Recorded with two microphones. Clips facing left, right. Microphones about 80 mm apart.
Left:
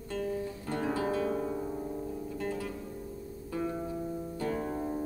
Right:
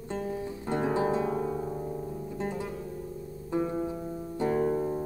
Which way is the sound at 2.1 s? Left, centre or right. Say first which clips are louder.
Right 1 dB; centre.